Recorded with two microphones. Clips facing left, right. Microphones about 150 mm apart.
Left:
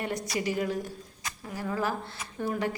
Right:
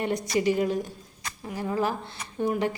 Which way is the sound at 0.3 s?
25° right (ahead or behind).